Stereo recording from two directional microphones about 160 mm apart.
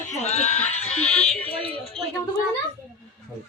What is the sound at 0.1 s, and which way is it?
Goat, 45° left (ahead or behind).